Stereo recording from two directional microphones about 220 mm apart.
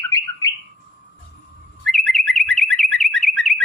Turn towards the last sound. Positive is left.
turn(degrees=0)  # may be behind; listen again after turning